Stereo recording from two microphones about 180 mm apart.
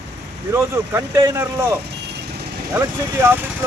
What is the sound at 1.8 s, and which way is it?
Vehicle, 65° right (ahead or behind).